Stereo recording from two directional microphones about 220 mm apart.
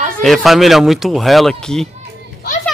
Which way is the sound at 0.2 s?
Centre (ahead or behind).